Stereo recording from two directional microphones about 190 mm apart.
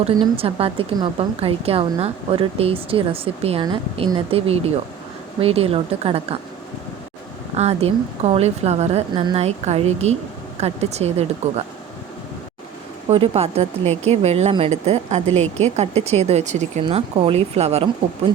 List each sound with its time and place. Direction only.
0.0 s a woman's voice: 30° right (ahead or behind)
7.5 s a woman's voice: 35° right (ahead or behind)
13.1 s a woman's voice: 30° right (ahead or behind)